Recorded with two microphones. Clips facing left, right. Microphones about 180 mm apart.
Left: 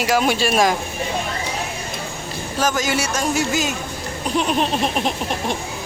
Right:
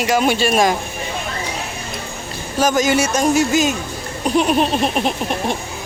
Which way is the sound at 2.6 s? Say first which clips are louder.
Right 5 dB; 15° right (ahead or behind).